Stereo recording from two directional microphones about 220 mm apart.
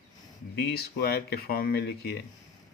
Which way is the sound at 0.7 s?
45° left (ahead or behind).